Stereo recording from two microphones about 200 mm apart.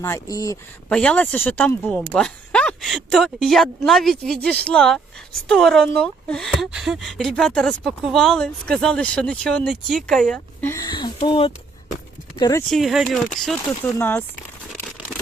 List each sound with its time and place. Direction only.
0.0 s speech: 15° left (ahead or behind)
0.9 s speech: 5° left (ahead or behind)
12.7 s speech: centre (ahead or behind)